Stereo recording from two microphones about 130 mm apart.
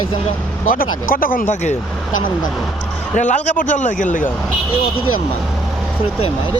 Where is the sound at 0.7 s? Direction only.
90° left.